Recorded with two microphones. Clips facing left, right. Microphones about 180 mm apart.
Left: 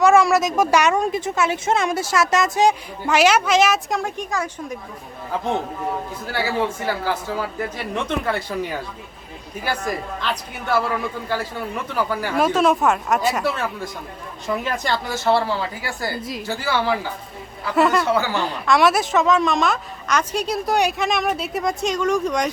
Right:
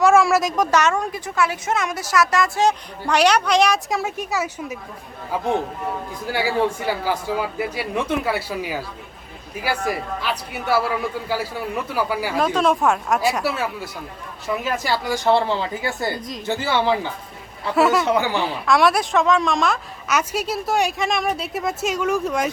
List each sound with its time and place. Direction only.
0.0 s a woman's voice: centre (ahead or behind); by 2.7 s 20° left (ahead or behind)
3.1 s a woman's voice: 5° left (ahead or behind)
6.3 s speech: 15° right (ahead or behind)
11.9 s speech: 10° right (ahead or behind)
12.5 s a woman's voice: centre (ahead or behind); by 17.1 s 20° right (ahead or behind)
17.7 s a woman's voice: centre (ahead or behind)
18.0 s speech: 15° right (ahead or behind)
18.4 s a woman's voice: centre (ahead or behind)